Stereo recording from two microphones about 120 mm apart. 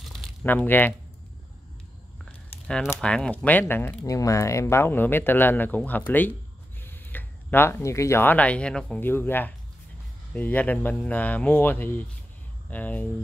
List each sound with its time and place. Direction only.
0.1 s crumpling: centre (ahead or behind)
0.5 s speech: 15° left (ahead or behind)
3.0 s speech: 10° left (ahead or behind)
9.0 s speech: 15° left (ahead or behind)